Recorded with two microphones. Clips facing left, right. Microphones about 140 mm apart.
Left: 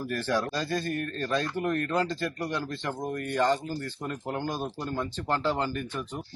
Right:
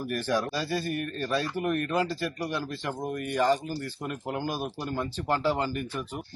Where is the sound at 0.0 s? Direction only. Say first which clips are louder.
Even; 15° right (ahead or behind).